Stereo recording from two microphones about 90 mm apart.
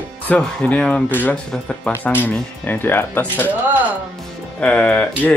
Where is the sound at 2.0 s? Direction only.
20° left (ahead or behind).